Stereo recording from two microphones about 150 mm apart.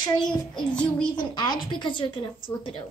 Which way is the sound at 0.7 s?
5° left (ahead or behind).